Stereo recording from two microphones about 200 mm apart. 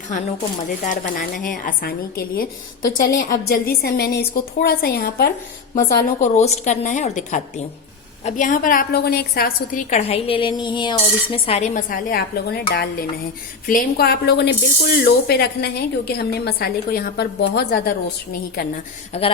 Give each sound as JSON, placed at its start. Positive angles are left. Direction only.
{"t": 0.9, "sound": "speech", "side_deg": 45}
{"t": 5.7, "sound": "a woman's voice", "side_deg": 40}
{"t": 9.9, "sound": "speech", "side_deg": 30}
{"t": 19.1, "sound": "a woman's voice", "side_deg": 30}